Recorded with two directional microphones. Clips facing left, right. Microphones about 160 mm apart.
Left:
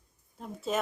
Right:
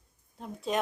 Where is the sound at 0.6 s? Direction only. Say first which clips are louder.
Right 1 dB; centre (ahead or behind).